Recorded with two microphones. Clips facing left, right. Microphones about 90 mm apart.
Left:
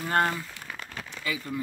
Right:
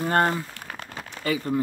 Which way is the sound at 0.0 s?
35° right (ahead or behind).